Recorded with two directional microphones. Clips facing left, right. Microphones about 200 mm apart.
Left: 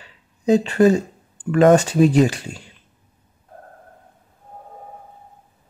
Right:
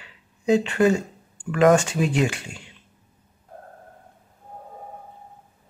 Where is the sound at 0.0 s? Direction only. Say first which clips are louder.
Left 4 dB; 35° left (ahead or behind).